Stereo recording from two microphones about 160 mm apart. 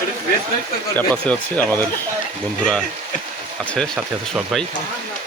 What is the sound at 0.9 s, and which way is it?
Speech, 10° left (ahead or behind).